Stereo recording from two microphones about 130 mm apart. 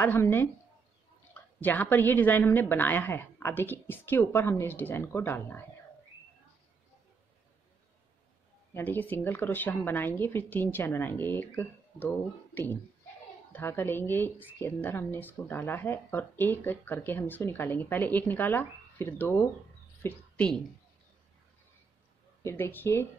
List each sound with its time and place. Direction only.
0.0 s speech: 15° left (ahead or behind)
1.6 s speech: 15° left (ahead or behind)
8.7 s speech: 15° left (ahead or behind)
22.4 s speech: 20° left (ahead or behind)